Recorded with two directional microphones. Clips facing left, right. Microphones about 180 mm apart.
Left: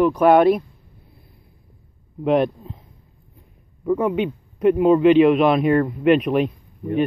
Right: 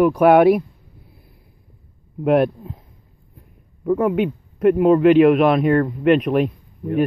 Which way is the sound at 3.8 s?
Centre (ahead or behind).